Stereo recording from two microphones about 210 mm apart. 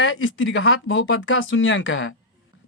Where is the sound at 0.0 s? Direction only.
65° left (ahead or behind).